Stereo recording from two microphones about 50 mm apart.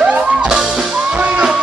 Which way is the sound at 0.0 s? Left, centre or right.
Centre.